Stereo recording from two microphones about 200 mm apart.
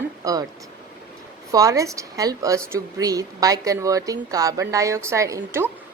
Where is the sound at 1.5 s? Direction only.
15° right (ahead or behind).